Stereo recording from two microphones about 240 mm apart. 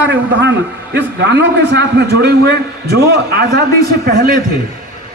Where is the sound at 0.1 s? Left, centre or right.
Right.